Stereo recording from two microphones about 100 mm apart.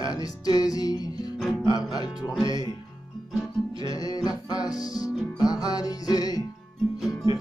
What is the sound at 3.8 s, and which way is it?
Music, 40° left (ahead or behind).